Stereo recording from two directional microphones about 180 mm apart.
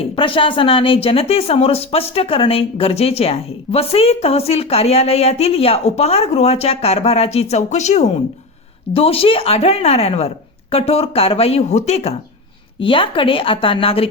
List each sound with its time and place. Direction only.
0.0 s a woman's voice: 30° left (ahead or behind)